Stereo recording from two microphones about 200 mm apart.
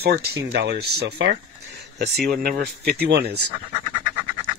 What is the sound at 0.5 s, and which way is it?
Speech, 55° right (ahead or behind).